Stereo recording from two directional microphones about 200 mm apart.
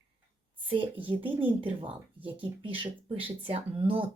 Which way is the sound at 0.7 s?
25° right (ahead or behind).